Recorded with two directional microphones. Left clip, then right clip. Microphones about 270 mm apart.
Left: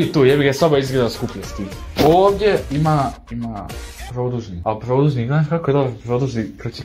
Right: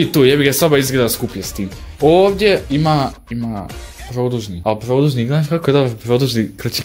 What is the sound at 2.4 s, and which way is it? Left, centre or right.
Speech, right.